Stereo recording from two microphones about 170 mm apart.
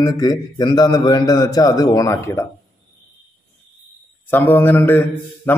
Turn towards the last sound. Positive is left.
turn(degrees=10)  # may be behind; listen again after turning